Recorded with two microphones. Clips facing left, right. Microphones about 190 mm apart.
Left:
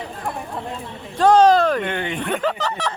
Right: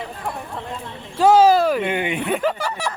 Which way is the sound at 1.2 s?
5° right (ahead or behind).